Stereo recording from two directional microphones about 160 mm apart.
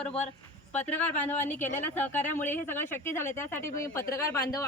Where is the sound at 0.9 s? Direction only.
10° left (ahead or behind).